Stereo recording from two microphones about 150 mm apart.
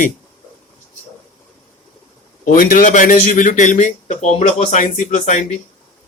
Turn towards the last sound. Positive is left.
turn(degrees=50)  # may be behind; listen again after turning